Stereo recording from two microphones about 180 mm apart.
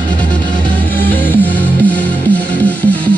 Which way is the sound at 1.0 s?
10° left (ahead or behind).